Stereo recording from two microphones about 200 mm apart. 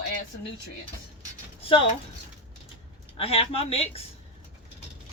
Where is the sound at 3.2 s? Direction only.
30° left (ahead or behind).